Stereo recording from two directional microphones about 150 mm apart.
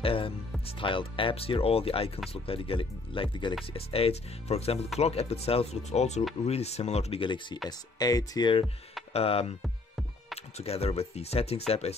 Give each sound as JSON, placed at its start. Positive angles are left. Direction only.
{"t": 0.0, "sound": "speech", "side_deg": 35}
{"t": 9.1, "sound": "speech", "side_deg": 40}
{"t": 9.6, "sound": "music", "side_deg": 0}
{"t": 10.6, "sound": "speech", "side_deg": 45}